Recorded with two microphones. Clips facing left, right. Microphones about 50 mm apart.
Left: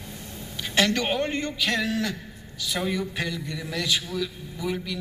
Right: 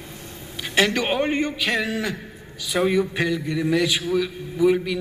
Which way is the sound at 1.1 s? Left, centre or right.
Centre.